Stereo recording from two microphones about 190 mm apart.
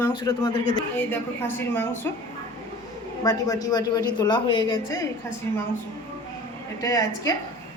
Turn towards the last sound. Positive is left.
turn(degrees=15)  # may be behind; listen again after turning